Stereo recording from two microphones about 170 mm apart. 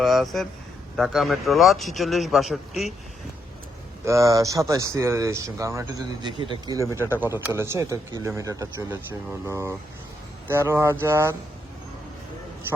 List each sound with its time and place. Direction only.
0.0 s a man's voice: centre (ahead or behind)
4.0 s speech: 20° right (ahead or behind)